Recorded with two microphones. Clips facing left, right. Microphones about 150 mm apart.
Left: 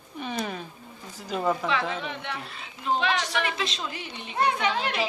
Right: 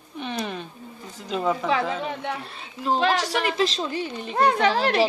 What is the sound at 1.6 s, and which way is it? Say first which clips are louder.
A woman's voice: right 4 dB; 40° right (ahead or behind).